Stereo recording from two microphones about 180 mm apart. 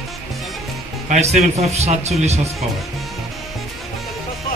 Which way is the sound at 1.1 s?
35° right (ahead or behind).